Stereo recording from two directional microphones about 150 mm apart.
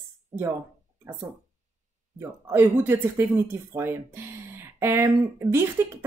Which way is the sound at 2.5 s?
10° right (ahead or behind).